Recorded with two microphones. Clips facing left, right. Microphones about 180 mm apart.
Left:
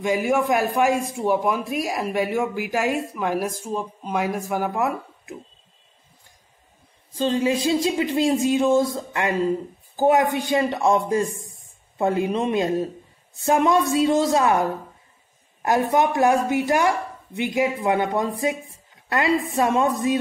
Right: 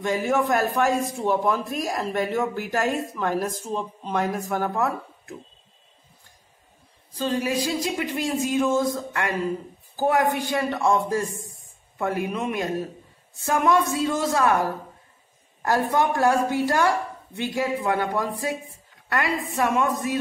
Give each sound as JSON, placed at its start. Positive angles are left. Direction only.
{"t": 0.0, "sound": "speech", "side_deg": 10}
{"t": 7.2, "sound": "speech", "side_deg": 25}